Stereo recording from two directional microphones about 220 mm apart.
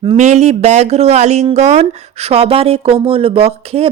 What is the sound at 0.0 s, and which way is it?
Speech, 25° right (ahead or behind).